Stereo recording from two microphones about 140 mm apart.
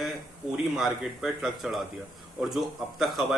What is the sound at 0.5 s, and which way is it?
Speech, 5° right (ahead or behind).